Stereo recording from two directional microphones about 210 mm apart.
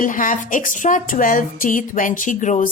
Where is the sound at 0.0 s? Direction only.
40° left (ahead or behind).